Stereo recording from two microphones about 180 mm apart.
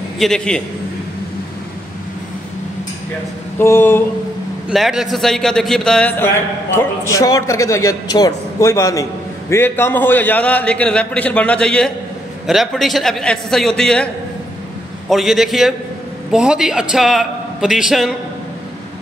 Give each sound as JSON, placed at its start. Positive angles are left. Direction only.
{"t": 0.2, "sound": "a man's voice", "side_deg": 5}
{"t": 3.5, "sound": "a man's voice", "side_deg": 15}
{"t": 4.6, "sound": "a man's voice", "side_deg": 0}
{"t": 15.0, "sound": "a man's voice", "side_deg": 0}